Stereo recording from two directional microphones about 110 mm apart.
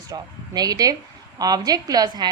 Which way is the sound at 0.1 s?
35° right (ahead or behind).